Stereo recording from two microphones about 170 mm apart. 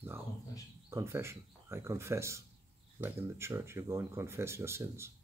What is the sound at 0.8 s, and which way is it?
Speech, 15° right (ahead or behind).